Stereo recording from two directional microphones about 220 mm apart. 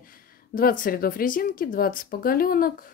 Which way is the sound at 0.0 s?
40° left (ahead or behind).